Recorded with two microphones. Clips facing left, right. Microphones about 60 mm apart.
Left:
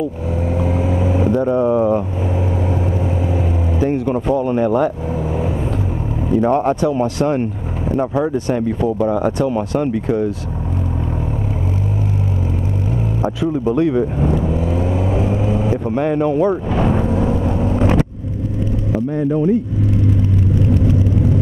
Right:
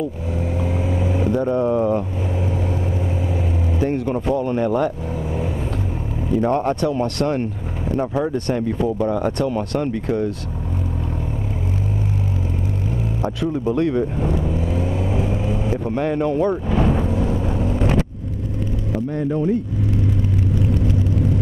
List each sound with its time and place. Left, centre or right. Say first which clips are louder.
0.6 s vehicle: left 5 dB; centre
3.8 s speech: left 3 dB; centre
4.4 s speech: left 4 dB; centre
6.2 s speech: left 4 dB; centre
13.4 s speech: left 3 dB; centre
14.5 s vehicle: left 4 dB; centre
15.9 s speech: left 3 dB; centre
17.1 s vehicle: left 4 dB; centre